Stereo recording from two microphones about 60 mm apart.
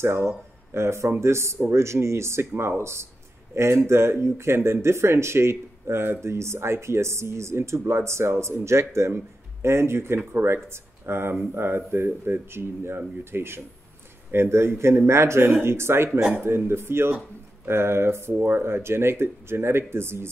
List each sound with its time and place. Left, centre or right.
0.0 s speech: right